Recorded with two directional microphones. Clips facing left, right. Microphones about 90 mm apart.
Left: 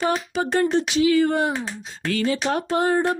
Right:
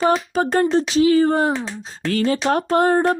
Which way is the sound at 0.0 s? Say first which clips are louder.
Right 5 dB; 40° right (ahead or behind).